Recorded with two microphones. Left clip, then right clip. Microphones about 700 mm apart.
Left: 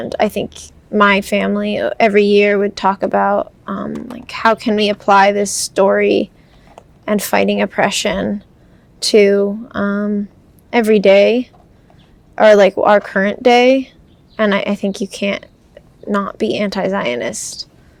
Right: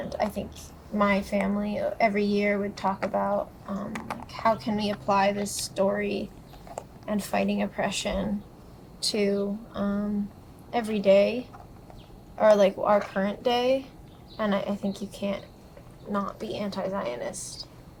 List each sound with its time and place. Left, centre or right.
0.1 s a woman's voice: left